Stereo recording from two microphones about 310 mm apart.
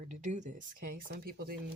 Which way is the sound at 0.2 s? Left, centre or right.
Right.